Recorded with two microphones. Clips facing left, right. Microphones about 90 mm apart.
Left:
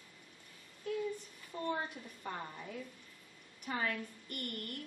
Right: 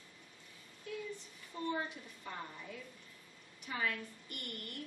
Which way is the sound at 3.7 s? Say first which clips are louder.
Left 1 dB; 50° left (ahead or behind).